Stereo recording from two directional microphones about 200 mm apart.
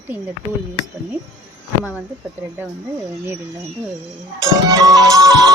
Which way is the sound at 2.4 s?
15° right (ahead or behind).